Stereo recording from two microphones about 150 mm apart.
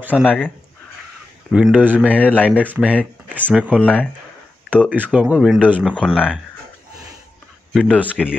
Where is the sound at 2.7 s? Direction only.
10° right (ahead or behind).